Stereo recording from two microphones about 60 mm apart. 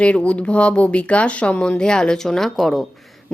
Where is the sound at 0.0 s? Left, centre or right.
Left.